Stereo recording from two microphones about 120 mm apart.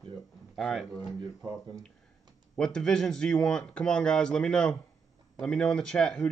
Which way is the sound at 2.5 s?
5° left (ahead or behind).